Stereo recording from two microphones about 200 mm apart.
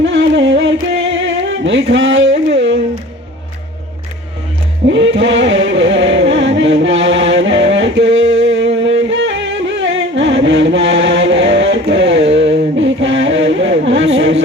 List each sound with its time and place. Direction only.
0.0 s music: 65° right (ahead or behind)
0.9 s a sound: 70° right (ahead or behind)
4.9 s music: 65° right (ahead or behind)